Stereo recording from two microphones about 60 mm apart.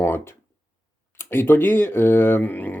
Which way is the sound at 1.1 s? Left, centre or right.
Left.